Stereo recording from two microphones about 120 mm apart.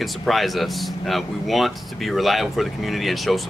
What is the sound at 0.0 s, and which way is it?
Speech, centre (ahead or behind).